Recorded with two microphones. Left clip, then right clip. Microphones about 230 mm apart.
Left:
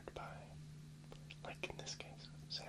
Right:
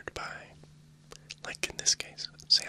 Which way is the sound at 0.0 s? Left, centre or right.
Right.